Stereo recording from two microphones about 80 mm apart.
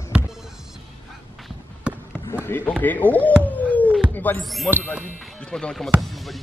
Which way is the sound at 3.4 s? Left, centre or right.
Centre.